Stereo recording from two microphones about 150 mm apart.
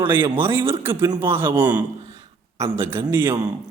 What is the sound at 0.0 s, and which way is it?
A man's voice, 15° right (ahead or behind).